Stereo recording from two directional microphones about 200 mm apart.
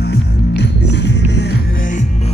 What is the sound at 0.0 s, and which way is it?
Music, 55° left (ahead or behind).